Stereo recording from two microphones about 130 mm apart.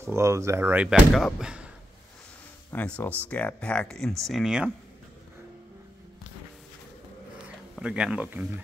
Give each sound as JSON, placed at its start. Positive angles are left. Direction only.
{"t": 0.0, "sound": "speech", "side_deg": -20}
{"t": 0.8, "sound": "speech", "side_deg": -5}
{"t": 2.7, "sound": "speech", "side_deg": 15}
{"t": 7.8, "sound": "speech", "side_deg": -5}